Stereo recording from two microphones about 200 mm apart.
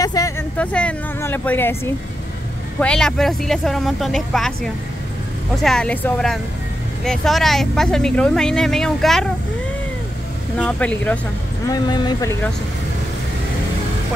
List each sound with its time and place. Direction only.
0.0 s a sound: 15° left (ahead or behind)
0.6 s speech: 5° left (ahead or behind)
2.8 s speech: 5° left (ahead or behind)
5.6 s speech: 5° left (ahead or behind)
10.6 s speech: 5° left (ahead or behind)
11.6 s speech: 20° left (ahead or behind)